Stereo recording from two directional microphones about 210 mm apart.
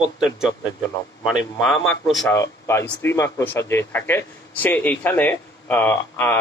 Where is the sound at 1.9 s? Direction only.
5° left (ahead or behind).